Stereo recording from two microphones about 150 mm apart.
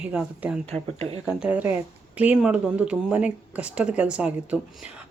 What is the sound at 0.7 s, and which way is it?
Speech, 40° right (ahead or behind).